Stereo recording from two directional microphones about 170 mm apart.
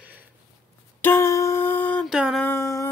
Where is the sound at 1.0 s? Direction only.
15° left (ahead or behind).